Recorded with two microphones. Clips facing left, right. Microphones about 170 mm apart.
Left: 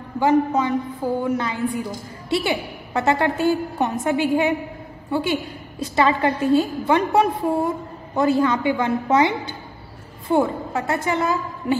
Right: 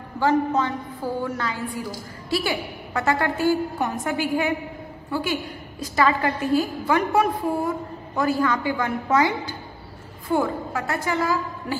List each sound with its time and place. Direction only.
0.2 s a woman's voice: 15° left (ahead or behind)